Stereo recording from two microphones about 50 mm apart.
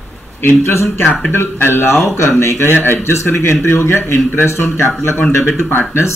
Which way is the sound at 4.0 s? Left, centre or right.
Left.